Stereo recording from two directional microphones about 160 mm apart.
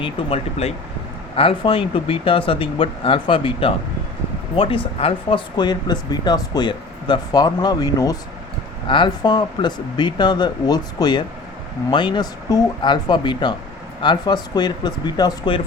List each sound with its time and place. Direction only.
0.0 s speech: 40° left (ahead or behind)